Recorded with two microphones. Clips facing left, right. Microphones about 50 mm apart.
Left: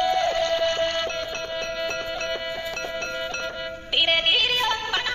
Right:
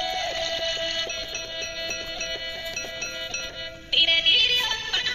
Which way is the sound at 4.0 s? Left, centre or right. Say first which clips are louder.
Even; centre.